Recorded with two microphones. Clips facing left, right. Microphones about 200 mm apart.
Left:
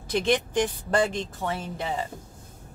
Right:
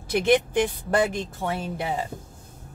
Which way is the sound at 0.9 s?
20° right (ahead or behind).